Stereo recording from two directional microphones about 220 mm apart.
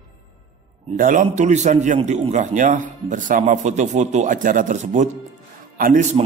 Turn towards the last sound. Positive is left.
turn(degrees=-40)  # may be behind; listen again after turning